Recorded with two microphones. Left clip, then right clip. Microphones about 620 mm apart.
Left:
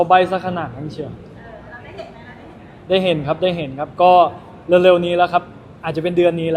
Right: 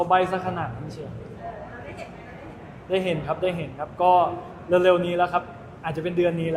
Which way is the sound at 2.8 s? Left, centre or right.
Left.